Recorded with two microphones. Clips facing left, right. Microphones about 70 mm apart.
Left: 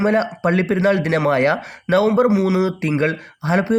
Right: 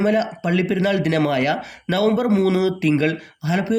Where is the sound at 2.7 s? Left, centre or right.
Left.